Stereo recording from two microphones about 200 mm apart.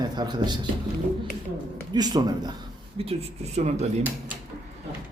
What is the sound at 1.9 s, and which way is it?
Speech, 20° right (ahead or behind).